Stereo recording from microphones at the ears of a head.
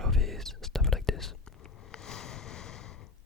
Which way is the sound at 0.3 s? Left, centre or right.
Centre.